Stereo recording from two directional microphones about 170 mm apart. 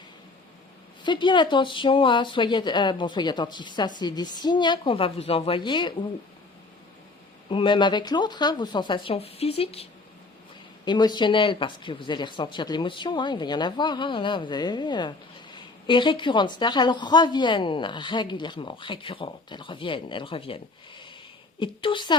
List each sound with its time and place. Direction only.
1.0 s a woman's voice: 25° left (ahead or behind)
7.5 s a woman's voice: 30° left (ahead or behind)
10.8 s a woman's voice: 25° left (ahead or behind)